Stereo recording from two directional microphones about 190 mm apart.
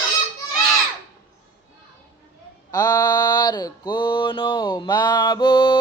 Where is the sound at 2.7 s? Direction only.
20° left (ahead or behind).